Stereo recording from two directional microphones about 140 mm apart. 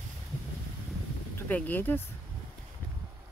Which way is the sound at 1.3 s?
10° left (ahead or behind).